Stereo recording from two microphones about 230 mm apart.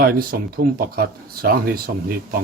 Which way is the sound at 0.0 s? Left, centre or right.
Right.